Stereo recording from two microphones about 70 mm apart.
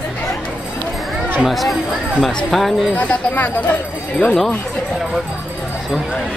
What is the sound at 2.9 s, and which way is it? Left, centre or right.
Speech, left.